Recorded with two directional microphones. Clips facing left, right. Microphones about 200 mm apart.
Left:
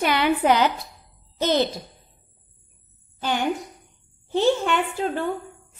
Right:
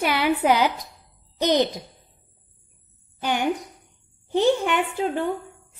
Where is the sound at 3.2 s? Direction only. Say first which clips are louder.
Right 1 dB; 15° right (ahead or behind).